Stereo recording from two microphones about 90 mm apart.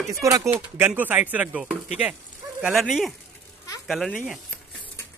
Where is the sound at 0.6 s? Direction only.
15° right (ahead or behind).